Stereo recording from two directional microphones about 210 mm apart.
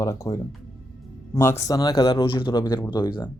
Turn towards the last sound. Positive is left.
turn(degrees=20)  # may be behind; listen again after turning